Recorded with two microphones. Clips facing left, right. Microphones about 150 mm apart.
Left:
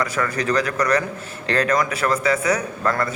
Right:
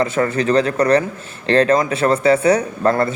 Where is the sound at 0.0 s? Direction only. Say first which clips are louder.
Right 6 dB; 25° right (ahead or behind).